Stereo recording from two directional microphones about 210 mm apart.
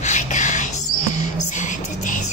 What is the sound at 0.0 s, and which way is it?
Music, 35° left (ahead or behind).